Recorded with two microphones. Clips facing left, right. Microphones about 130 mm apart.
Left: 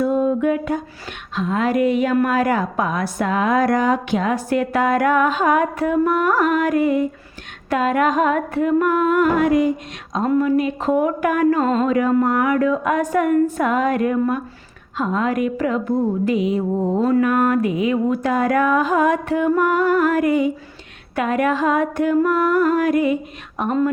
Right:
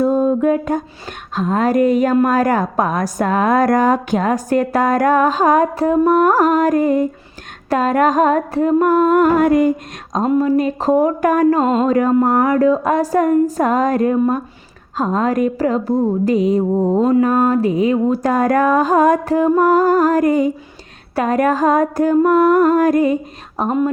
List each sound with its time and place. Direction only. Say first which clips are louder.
0.0 s a sound: right 3 dB; 35° right (ahead or behind)
1.4 s a woman's voice: right 4 dB; 40° right (ahead or behind)
10.2 s music: right 2 dB; 25° right (ahead or behind)
10.6 s a woman's voice: right 4 dB; 35° right (ahead or behind)
11.6 s music: right 3 dB; 30° right (ahead or behind)
12.2 s a woman's voice: right 4 dB; 40° right (ahead or behind)
23.6 s music: right 2 dB; 20° right (ahead or behind)